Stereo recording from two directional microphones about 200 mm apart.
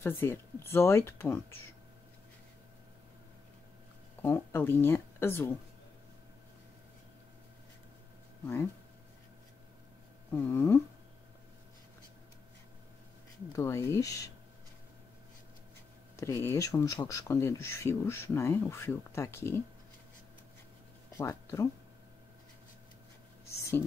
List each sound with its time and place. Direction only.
0.0 s speech: 10° left (ahead or behind)
4.2 s speech: 10° left (ahead or behind)
10.3 s speech: 10° left (ahead or behind)
13.5 s speech: 15° left (ahead or behind)
16.2 s speech: 15° left (ahead or behind)
21.2 s speech: 15° left (ahead or behind)